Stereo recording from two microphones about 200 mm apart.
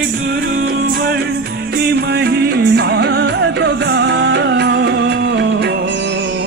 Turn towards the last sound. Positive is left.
turn(degrees=-60)  # may be behind; listen again after turning